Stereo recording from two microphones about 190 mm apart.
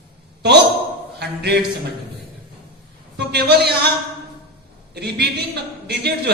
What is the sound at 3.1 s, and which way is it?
Speech, 60° right (ahead or behind).